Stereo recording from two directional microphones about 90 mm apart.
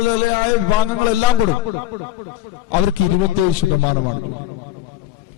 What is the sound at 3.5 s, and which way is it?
Speech, 10° right (ahead or behind).